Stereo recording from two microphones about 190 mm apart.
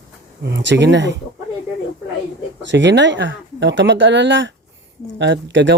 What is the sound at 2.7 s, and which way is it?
Speech, 70° right (ahead or behind).